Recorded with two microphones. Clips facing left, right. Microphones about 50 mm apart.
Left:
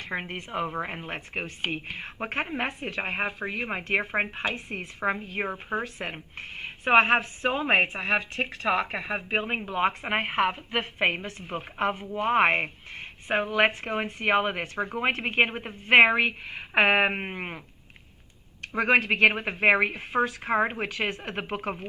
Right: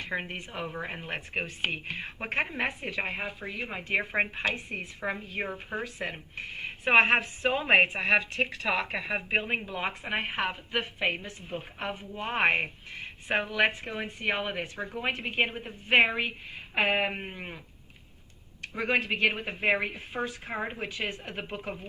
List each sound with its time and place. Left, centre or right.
0.3 s speech: left
0.9 s speech: centre
1.6 s speech: centre
2.6 s speech: left
4.5 s speech: left
5.3 s a woman's voice: left
5.8 s speech: left
7.1 s speech: left
11.0 s speech: left
11.9 s speech: left
18.6 s speech: left